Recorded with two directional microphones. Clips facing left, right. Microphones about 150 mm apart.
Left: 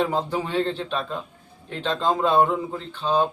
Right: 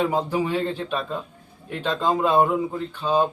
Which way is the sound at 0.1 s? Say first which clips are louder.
Right 2 dB; 10° right (ahead or behind).